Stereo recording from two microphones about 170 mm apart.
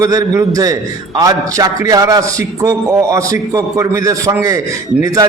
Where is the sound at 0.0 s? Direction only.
20° right (ahead or behind).